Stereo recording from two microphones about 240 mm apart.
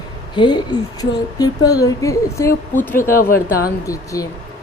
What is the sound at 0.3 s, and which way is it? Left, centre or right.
A woman's voice, centre.